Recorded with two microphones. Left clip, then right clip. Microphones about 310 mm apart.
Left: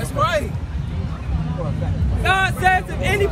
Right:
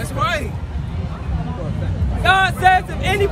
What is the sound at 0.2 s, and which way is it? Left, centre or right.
Vehicle, centre.